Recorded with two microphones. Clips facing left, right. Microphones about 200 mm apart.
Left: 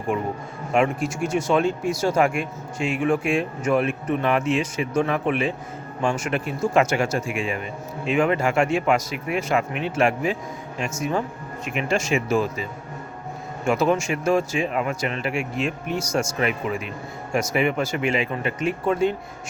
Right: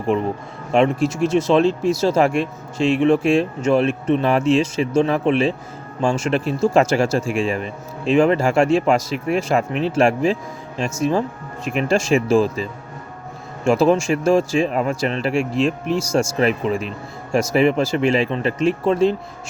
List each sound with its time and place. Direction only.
0.7 s speech: 25° right (ahead or behind)
11.7 s speech: 35° right (ahead or behind)
13.7 s speech: 30° right (ahead or behind)